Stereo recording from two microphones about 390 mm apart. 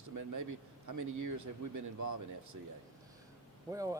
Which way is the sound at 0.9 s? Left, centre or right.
Right.